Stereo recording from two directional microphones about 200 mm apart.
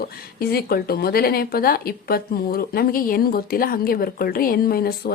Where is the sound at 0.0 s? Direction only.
50° left (ahead or behind).